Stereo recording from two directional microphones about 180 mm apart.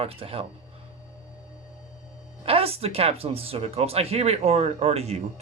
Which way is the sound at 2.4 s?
30° right (ahead or behind).